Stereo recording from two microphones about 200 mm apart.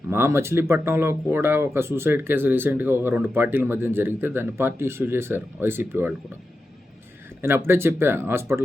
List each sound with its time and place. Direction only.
0.1 s speech: 10° right (ahead or behind)
7.4 s speech: 10° right (ahead or behind)